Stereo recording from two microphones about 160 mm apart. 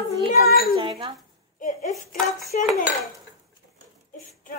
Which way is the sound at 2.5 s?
55° left (ahead or behind).